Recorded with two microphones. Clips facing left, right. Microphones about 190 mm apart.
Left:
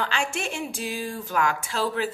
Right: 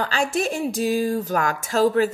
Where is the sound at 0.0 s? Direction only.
40° right (ahead or behind).